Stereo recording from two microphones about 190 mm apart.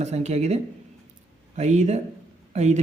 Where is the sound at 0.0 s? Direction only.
35° right (ahead or behind).